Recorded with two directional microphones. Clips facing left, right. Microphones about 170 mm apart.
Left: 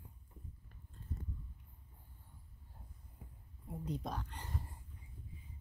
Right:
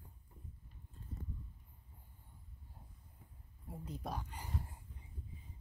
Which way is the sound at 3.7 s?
5° right (ahead or behind).